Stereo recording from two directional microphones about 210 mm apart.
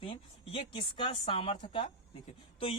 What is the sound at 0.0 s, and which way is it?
A woman's voice, 25° left (ahead or behind).